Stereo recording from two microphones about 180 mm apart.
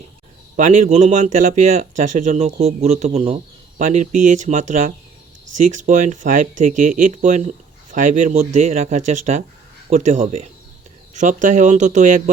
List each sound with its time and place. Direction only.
0.5 s speech: 40° right (ahead or behind)
3.8 s speech: 45° right (ahead or behind)